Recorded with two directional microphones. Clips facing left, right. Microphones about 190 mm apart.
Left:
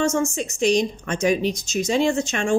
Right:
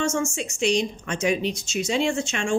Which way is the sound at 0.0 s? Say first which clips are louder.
Left 3 dB; 35° left (ahead or behind).